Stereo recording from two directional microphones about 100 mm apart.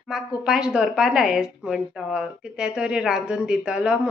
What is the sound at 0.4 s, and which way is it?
A woman's voice, 10° right (ahead or behind).